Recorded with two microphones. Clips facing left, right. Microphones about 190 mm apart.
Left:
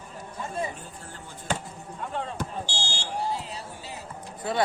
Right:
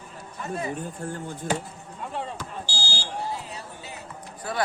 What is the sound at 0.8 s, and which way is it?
Speech, 50° right (ahead or behind).